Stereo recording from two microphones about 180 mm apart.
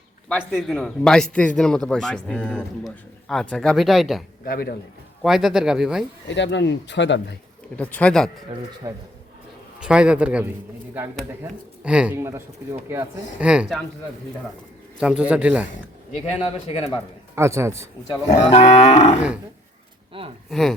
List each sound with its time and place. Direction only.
0.5 s speech: 5° left (ahead or behind)
4.4 s speech: 55° left (ahead or behind)
5.2 s speech: centre (ahead or behind)
6.2 s speech: 80° left
7.8 s speech: 10° left (ahead or behind)
8.5 s speech: 35° right (ahead or behind)
9.8 s speech: 5° right (ahead or behind)
11.8 s speech: 5° right (ahead or behind)
14.9 s speech: 5° right (ahead or behind)
16.4 s cattle: 35° left (ahead or behind)
17.3 s speech: 15° right (ahead or behind)
18.3 s cattle: 40° left (ahead or behind)
20.1 s speech: 30° right (ahead or behind)
20.5 s speech: centre (ahead or behind)